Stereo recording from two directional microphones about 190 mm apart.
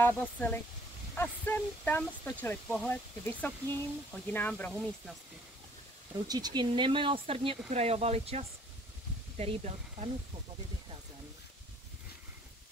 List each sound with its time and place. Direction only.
0.0 s speech: 10° left (ahead or behind)
6.1 s speech: 20° right (ahead or behind)